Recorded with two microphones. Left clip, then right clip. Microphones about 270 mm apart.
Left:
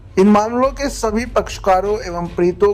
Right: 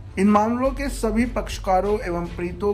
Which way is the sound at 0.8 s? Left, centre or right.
Centre.